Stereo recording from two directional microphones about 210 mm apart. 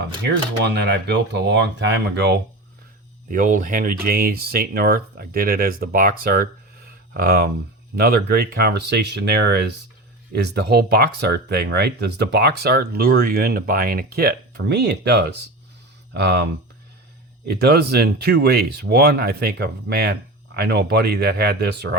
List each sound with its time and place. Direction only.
0.0 s speech: 55° right (ahead or behind)
3.2 s speech: 40° right (ahead or behind)